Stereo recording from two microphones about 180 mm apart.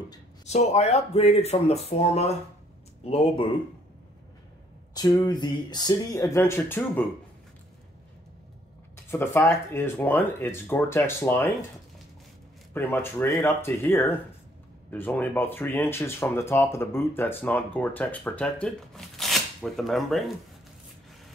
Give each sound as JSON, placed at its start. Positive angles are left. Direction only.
{"t": 0.5, "sound": "speech", "side_deg": 40}
{"t": 4.9, "sound": "speech", "side_deg": 20}
{"t": 8.9, "sound": "speech", "side_deg": 15}
{"t": 12.7, "sound": "speech", "side_deg": 10}